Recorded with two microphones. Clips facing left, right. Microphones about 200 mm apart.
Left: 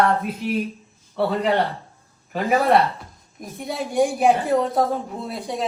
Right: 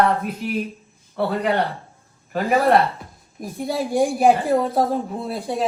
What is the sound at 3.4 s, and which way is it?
Speech, 30° right (ahead or behind).